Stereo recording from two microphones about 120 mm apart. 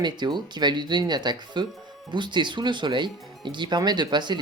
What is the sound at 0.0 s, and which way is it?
Speech, 40° right (ahead or behind).